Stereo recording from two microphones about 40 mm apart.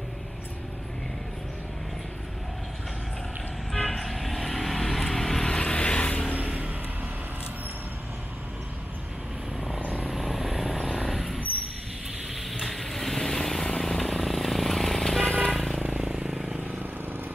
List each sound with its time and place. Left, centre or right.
3.7 s vehicle: centre
5.5 s vehicle: left
6.3 s vehicle: right
10.1 s helicopter: centre
10.9 s vehicle: centre
12.4 s vehicle: centre
15.2 s vehicle: left
15.5 s vehicle: centre
15.8 s vehicle: right